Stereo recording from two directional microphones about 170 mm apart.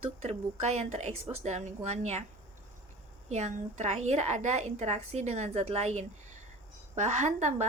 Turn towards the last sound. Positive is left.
turn(degrees=-45)  # may be behind; listen again after turning